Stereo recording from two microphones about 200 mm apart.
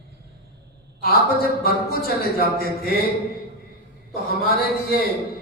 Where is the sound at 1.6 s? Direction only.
50° left (ahead or behind).